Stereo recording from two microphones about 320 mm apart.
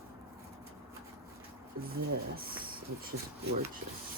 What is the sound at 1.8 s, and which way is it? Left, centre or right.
Speech, right.